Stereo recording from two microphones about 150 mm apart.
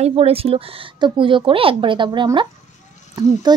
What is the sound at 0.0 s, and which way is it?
A woman's voice, 40° right (ahead or behind).